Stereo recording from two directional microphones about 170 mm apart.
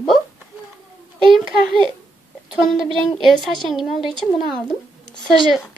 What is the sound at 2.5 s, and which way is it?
Speech, centre (ahead or behind).